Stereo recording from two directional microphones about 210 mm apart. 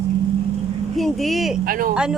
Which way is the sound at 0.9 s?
Centre (ahead or behind).